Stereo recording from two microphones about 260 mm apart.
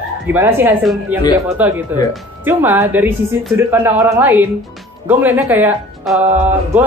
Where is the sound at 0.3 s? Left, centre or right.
Centre.